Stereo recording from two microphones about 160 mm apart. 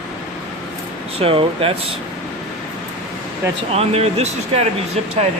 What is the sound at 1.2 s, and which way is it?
Speech, 35° right (ahead or behind).